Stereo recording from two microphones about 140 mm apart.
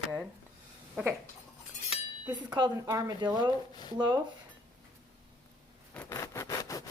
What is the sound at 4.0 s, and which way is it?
Speech, 30° right (ahead or behind).